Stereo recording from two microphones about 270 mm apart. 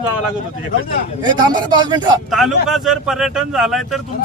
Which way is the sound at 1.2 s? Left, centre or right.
Centre.